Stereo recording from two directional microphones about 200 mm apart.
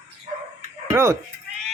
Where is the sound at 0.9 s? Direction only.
15° right (ahead or behind).